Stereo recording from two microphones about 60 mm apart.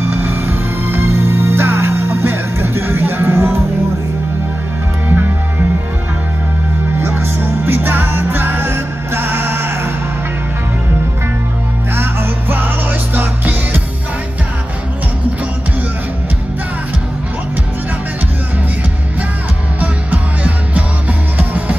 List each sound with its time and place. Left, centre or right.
0.1 s music: right
5.0 s music: right
7.0 s music: right
11.9 s music: right
19.8 s music: right